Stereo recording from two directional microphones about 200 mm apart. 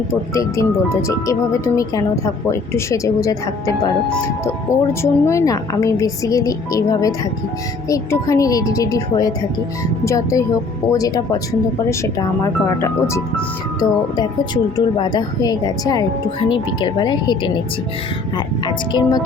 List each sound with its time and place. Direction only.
0.3 s speech: 15° left (ahead or behind)
12.4 s speech: 15° left (ahead or behind)